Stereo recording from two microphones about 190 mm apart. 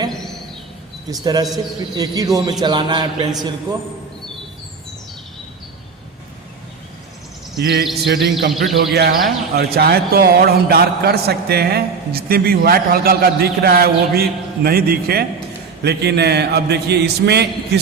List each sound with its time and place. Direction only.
1.1 s a man's voice: 20° right (ahead or behind)
7.5 s speech: 60° right (ahead or behind)
8.5 s speech: centre (ahead or behind)
9.0 s speech: 60° right (ahead or behind)